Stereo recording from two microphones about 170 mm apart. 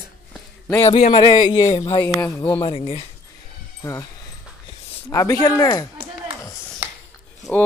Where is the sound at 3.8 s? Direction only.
20° left (ahead or behind).